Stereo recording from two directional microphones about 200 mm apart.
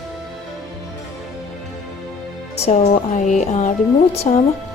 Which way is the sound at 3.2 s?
40° left (ahead or behind).